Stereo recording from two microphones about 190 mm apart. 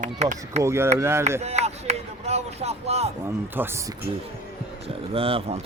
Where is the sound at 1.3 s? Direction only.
35° right (ahead or behind).